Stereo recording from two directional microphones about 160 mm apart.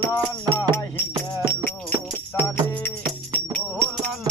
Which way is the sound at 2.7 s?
10° left (ahead or behind).